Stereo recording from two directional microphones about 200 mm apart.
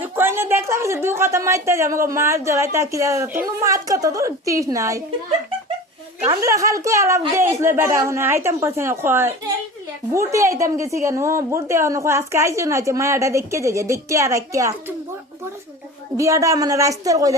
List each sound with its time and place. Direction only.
0.0 s speech: 10° right (ahead or behind)
6.2 s speech: 20° right (ahead or behind)
16.1 s speech: 15° right (ahead or behind)